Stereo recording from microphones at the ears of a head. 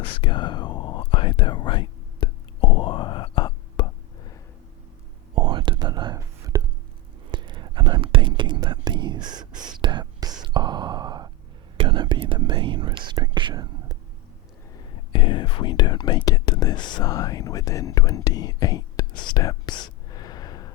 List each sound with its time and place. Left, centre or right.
0.0 s whispering: left
5.3 s whispering: right
14.8 s speech: left